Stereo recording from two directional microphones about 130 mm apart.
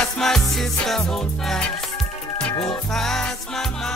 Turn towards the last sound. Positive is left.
turn(degrees=5)  # may be behind; listen again after turning